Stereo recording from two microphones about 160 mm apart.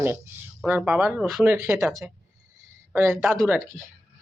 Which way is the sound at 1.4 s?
15° right (ahead or behind).